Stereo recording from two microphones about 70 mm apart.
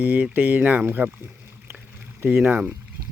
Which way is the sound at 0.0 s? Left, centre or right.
Right.